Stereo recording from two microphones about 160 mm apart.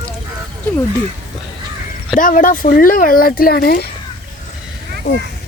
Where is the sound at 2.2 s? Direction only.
55° left (ahead or behind); by 3.9 s 70° left (ahead or behind).